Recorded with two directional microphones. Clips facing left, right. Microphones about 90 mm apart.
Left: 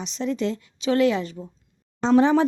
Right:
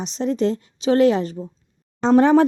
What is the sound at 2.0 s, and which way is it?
Speech, 50° right (ahead or behind).